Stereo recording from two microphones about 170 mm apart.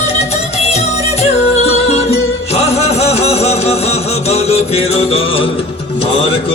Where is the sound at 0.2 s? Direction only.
40° left (ahead or behind).